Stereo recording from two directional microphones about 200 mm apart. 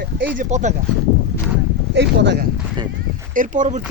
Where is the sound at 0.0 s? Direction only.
50° right (ahead or behind).